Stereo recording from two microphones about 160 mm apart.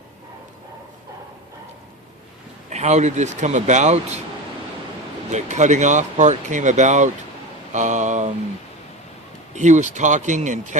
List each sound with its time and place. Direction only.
2.6 s speech: 45° right (ahead or behind)
5.3 s speech: 45° right (ahead or behind)
9.5 s speech: 50° right (ahead or behind)